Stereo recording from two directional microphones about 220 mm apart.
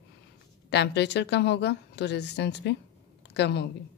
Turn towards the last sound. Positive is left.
turn(degrees=50)  # may be behind; listen again after turning